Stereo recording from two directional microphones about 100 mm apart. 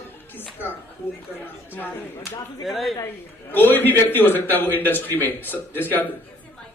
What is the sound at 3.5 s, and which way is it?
A man's voice, 20° left (ahead or behind).